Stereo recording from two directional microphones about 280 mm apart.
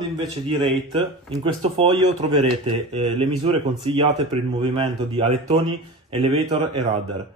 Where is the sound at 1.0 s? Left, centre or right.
Centre.